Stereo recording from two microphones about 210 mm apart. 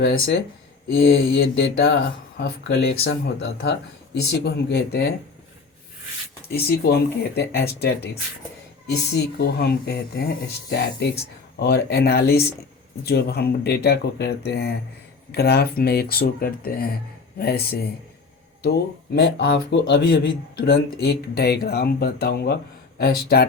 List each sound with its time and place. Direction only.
0.0 s speech: 50° left (ahead or behind)
1.4 s mantra: 55° left (ahead or behind)
2.4 s speech: 50° left (ahead or behind)
6.5 s speech: 50° left (ahead or behind)
9.1 s speech: 50° left (ahead or behind)